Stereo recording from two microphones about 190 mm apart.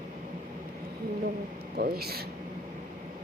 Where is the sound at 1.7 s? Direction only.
55° right (ahead or behind).